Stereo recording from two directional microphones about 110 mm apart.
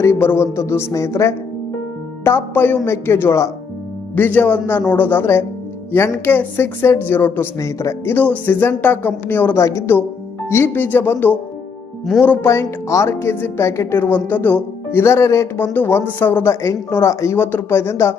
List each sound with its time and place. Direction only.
0.0 s speech: 20° left (ahead or behind)
4.1 s a woman's voice: 15° left (ahead or behind)
8.1 s a woman's voice: 15° left (ahead or behind)